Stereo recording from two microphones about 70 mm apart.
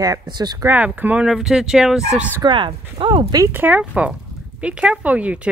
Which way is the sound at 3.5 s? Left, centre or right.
Right.